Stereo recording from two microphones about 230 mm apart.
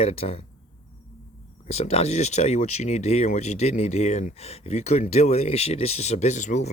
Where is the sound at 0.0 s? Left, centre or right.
Left.